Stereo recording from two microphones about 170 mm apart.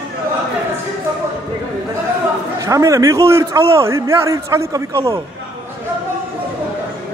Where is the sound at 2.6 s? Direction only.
20° right (ahead or behind).